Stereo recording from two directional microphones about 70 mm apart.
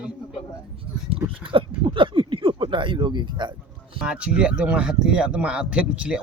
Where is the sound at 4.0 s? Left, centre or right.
Centre.